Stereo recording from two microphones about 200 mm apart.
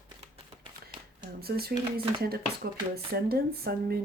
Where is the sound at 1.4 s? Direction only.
50° right (ahead or behind).